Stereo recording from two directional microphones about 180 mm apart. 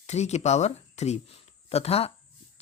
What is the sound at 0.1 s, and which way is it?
Speech, 40° left (ahead or behind).